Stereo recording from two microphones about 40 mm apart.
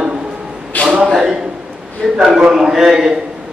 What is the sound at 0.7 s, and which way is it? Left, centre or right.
Speech, left.